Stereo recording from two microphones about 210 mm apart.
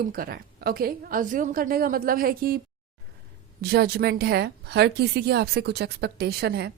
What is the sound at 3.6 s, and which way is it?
A woman's voice, 50° right (ahead or behind).